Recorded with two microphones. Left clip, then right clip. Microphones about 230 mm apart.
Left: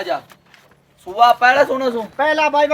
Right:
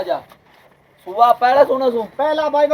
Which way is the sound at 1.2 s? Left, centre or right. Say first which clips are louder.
Even; centre.